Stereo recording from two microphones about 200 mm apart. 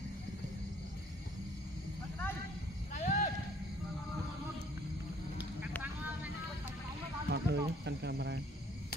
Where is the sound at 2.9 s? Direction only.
35° left (ahead or behind).